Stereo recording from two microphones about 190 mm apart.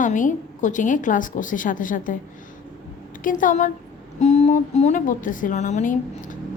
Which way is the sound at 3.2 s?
45° left (ahead or behind).